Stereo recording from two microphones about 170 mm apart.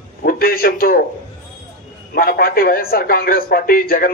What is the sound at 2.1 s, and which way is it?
A man's voice, 60° left (ahead or behind).